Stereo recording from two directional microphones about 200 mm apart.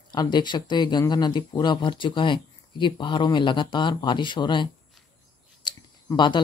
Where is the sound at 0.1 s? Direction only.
20° left (ahead or behind).